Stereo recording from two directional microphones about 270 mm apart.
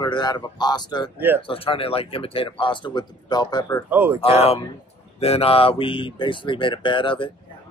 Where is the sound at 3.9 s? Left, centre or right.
Centre.